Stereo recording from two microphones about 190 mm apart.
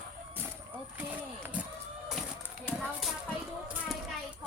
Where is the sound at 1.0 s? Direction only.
10° right (ahead or behind).